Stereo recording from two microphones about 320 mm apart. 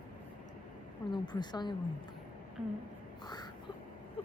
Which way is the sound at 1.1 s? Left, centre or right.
Centre.